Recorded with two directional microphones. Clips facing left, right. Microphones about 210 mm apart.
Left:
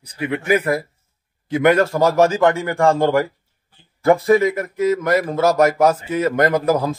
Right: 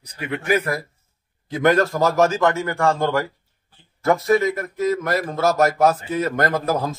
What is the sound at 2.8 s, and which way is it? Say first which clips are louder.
Speech: left 5 dB; 30° left (ahead or behind).